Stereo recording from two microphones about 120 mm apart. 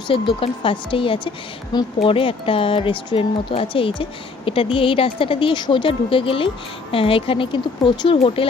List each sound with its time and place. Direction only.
0.1 s speech: 45° left (ahead or behind)